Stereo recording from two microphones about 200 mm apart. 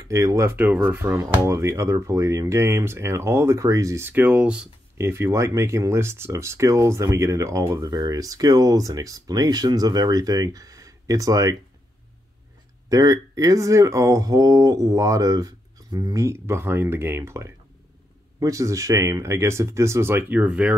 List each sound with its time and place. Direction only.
0.1 s speech: 15° right (ahead or behind)
12.9 s speech: 15° right (ahead or behind)